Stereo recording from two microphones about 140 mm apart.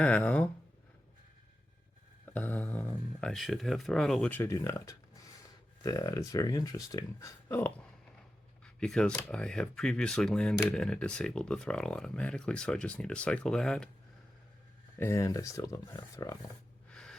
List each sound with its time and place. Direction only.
0.0 s speech: 10° left (ahead or behind)
2.2 s speech: 10° left (ahead or behind)
4.3 s speech: 20° left (ahead or behind)
14.9 s speech: 20° left (ahead or behind)
16.9 s gasp: 5° left (ahead or behind)